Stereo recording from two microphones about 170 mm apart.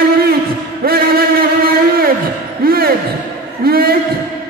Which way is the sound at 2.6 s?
60° right (ahead or behind).